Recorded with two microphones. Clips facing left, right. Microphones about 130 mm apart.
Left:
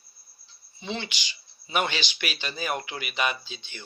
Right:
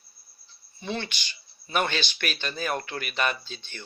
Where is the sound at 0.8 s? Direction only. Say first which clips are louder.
Right 1 dB; 15° left (ahead or behind).